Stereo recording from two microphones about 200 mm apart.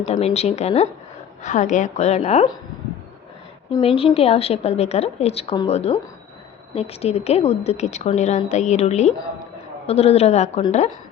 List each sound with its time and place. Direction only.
0.0 s a woman's voice: 30° left (ahead or behind)
3.8 s a woman's voice: 30° left (ahead or behind)